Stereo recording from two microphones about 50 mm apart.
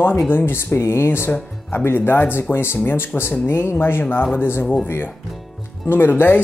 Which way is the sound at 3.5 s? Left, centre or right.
Left.